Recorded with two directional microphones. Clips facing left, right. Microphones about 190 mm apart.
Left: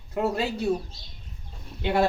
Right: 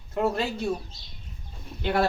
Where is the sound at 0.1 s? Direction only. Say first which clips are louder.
Even; 5° left (ahead or behind).